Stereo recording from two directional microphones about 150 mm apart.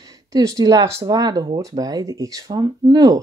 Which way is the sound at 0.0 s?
25° right (ahead or behind).